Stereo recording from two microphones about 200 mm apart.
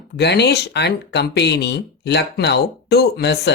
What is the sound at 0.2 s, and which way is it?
Speech, 55° left (ahead or behind).